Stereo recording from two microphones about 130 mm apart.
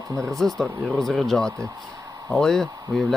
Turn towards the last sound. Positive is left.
turn(degrees=0)  # may be behind; listen again after turning